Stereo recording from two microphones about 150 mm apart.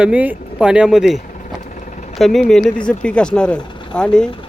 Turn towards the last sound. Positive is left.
turn(degrees=5)  # may be behind; listen again after turning